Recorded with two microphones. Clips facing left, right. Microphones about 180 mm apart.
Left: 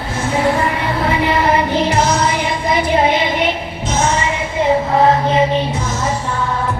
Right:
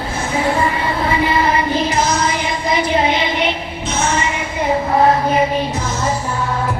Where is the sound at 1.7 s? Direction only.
65° left (ahead or behind).